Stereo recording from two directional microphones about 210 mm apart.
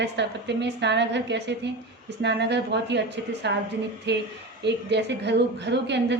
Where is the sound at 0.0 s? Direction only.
55° right (ahead or behind).